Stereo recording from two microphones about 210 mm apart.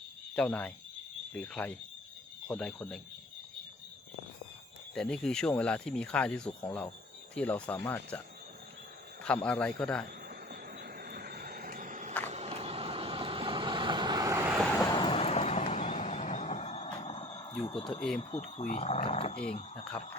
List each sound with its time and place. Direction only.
0.3 s speech: 5° left (ahead or behind)
4.9 s speech: 5° left (ahead or behind)
9.2 s speech: 5° left (ahead or behind)
10.2 s vehicle: 45° right (ahead or behind); by 14.7 s 10° right (ahead or behind)
14.9 s vehicle: 25° left (ahead or behind)
17.5 s speech: 25° left (ahead or behind)